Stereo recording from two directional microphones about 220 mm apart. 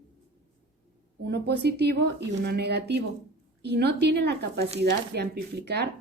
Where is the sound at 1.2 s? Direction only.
50° right (ahead or behind).